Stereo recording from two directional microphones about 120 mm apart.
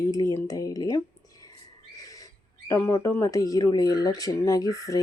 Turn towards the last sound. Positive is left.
turn(degrees=25)  # may be behind; listen again after turning